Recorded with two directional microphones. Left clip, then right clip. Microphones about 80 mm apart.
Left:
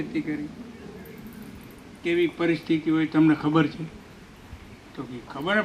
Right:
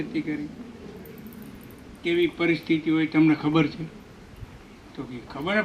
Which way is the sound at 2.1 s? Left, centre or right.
Right.